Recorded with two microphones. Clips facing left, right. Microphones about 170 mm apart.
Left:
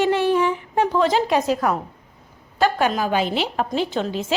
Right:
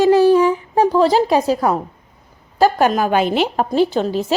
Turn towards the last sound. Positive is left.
turn(degrees=-40)  # may be behind; listen again after turning